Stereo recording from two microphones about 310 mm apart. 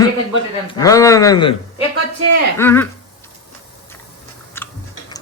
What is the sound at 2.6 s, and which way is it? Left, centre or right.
Speech, centre.